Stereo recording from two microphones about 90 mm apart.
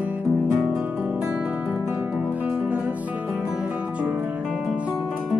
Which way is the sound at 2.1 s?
15° right (ahead or behind).